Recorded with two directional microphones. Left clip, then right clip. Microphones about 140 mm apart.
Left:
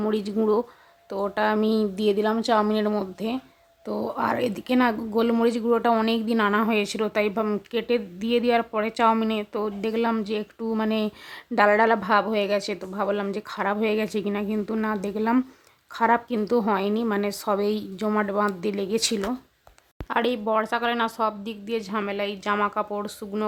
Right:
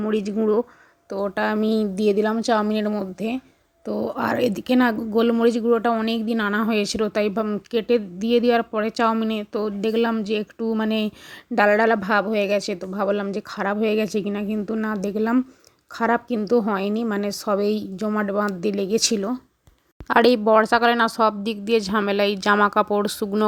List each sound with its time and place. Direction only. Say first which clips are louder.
0.0 s a woman's voice: right 2 dB; 15° right (ahead or behind)
20.1 s speech: right 8 dB; 40° right (ahead or behind)